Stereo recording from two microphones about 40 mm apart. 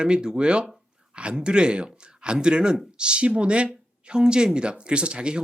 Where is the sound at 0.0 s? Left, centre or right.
Right.